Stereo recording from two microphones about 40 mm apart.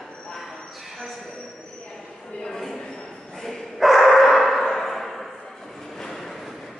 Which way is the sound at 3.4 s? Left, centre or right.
Centre.